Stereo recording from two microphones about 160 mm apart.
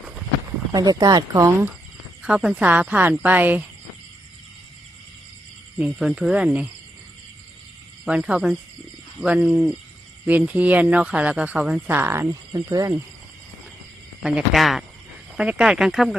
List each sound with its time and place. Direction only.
0.7 s speech: 25° right (ahead or behind)
2.2 s speech: 5° right (ahead or behind)
5.7 s speech: 5° right (ahead or behind)
8.0 s speech: 5° right (ahead or behind)
14.2 s speech: 5° right (ahead or behind)